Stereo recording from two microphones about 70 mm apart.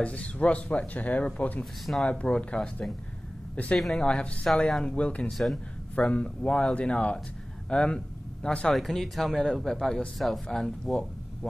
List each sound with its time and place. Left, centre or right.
0.0 s speech: centre
1.6 s speech: centre
2.0 s speech: centre
4.0 s speech: centre